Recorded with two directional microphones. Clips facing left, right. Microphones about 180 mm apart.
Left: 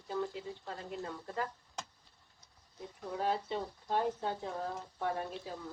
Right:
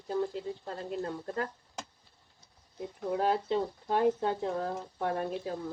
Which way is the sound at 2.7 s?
65° right (ahead or behind).